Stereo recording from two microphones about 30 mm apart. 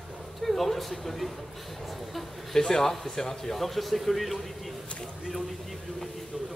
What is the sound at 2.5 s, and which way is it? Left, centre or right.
A man's voice, centre.